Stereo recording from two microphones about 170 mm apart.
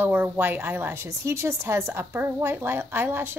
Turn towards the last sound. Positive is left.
turn(degrees=-15)  # may be behind; listen again after turning